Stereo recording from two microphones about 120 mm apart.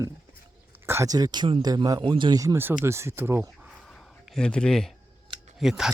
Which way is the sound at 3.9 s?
Centre (ahead or behind).